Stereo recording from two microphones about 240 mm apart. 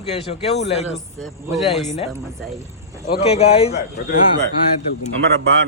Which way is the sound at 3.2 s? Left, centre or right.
Left.